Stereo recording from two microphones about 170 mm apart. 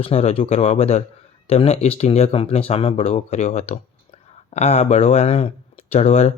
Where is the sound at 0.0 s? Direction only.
35° left (ahead or behind).